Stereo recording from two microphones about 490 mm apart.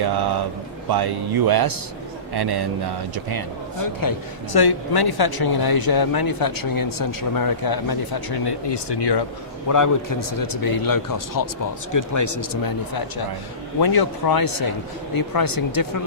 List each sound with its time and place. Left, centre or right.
0.9 s speech: right
4.0 s a man's voice: left
9.6 s a man's voice: left